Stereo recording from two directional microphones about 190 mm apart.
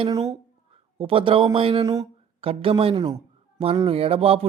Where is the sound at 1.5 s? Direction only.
30° right (ahead or behind).